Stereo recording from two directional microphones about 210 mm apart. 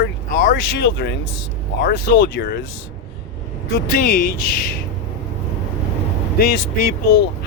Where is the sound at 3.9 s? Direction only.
45° left (ahead or behind).